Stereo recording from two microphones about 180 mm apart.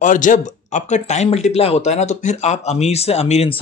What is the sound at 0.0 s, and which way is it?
Speech, 45° left (ahead or behind).